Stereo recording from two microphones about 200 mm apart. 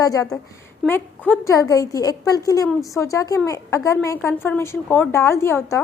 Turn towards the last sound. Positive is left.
turn(degrees=10)  # may be behind; listen again after turning